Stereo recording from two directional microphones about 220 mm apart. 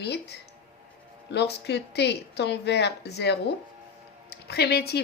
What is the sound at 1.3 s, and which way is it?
Speech, 50° left (ahead or behind).